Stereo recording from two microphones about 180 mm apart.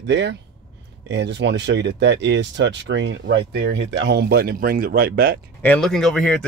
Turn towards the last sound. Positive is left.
turn(degrees=5)  # may be behind; listen again after turning